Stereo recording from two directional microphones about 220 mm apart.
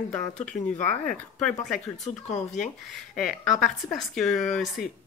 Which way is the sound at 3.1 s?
Centre (ahead or behind).